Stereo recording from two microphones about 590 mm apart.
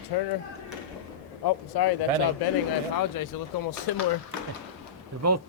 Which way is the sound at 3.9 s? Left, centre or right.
Left.